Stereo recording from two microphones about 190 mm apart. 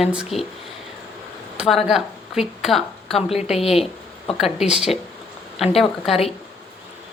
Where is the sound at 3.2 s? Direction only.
30° left (ahead or behind).